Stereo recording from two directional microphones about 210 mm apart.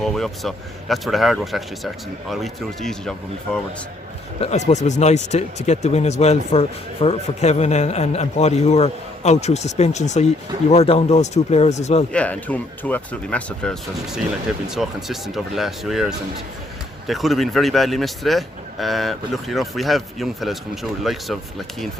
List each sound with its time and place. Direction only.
0.0 s speech: centre (ahead or behind)
4.4 s speech: 30° left (ahead or behind)
12.1 s speech: 5° left (ahead or behind)